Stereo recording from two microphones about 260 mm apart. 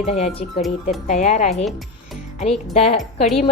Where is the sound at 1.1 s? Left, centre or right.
Left.